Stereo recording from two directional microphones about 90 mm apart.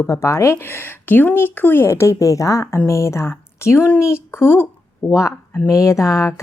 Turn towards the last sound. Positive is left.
turn(degrees=35)  # may be behind; listen again after turning